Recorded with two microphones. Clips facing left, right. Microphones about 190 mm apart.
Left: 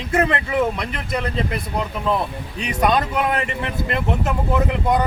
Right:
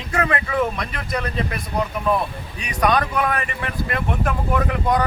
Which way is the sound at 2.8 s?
25° left (ahead or behind).